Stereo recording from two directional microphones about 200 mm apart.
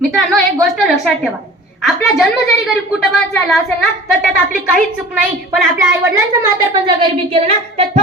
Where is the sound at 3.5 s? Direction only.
Centre (ahead or behind).